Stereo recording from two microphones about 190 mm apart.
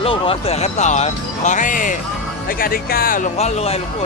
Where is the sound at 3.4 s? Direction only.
35° left (ahead or behind).